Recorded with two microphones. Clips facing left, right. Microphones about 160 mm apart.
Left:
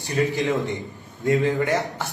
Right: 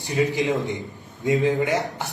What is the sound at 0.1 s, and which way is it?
A man's voice, 20° right (ahead or behind).